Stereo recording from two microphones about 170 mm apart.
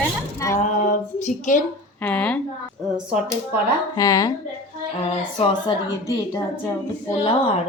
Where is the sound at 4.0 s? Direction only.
20° left (ahead or behind).